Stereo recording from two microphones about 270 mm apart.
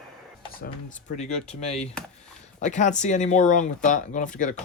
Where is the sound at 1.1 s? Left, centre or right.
Left.